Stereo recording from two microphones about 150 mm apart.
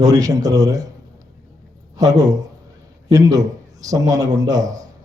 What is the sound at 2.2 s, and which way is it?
A man's voice, 25° right (ahead or behind).